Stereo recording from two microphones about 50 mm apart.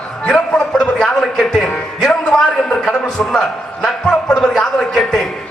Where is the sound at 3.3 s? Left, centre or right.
Centre.